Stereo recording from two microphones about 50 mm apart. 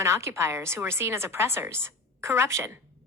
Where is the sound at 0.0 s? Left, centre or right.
Right.